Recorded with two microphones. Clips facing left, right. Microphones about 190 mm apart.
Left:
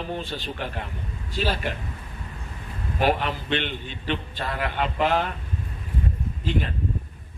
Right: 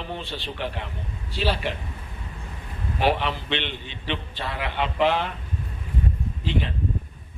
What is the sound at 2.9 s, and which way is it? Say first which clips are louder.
A man's voice: even; 45° left (ahead or behind).